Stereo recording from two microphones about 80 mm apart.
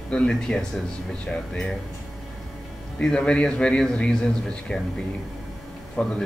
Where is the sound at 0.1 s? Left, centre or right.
Centre.